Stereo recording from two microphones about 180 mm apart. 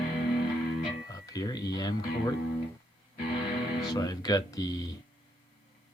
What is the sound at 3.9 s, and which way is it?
Speech, 20° left (ahead or behind).